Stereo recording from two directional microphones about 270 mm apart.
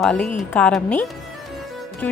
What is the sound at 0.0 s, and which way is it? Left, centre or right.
A woman's voice, centre.